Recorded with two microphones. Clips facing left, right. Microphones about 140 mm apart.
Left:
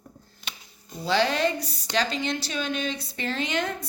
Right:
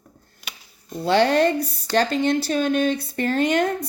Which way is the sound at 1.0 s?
55° right (ahead or behind).